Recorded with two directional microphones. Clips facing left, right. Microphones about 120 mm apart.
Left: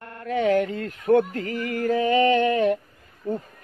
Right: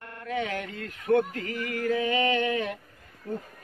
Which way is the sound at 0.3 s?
45° left (ahead or behind).